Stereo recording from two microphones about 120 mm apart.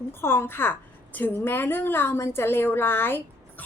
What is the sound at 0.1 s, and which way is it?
A woman's voice, 20° left (ahead or behind).